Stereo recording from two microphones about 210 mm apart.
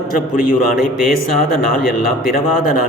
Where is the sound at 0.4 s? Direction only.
40° left (ahead or behind).